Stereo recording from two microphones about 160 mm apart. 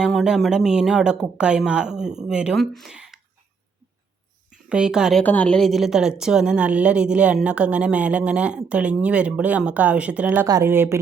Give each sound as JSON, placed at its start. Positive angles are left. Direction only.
{"t": 0.0, "sound": "speech", "side_deg": 0}
{"t": 4.7, "sound": "speech", "side_deg": -5}
{"t": 5.2, "sound": "a woman's voice", "side_deg": 10}
{"t": 10.4, "sound": "a woman's voice", "side_deg": -20}